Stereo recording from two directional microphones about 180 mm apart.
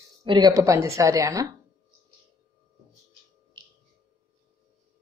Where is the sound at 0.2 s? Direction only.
20° right (ahead or behind).